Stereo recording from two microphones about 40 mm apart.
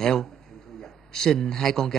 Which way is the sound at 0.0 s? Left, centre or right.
Centre.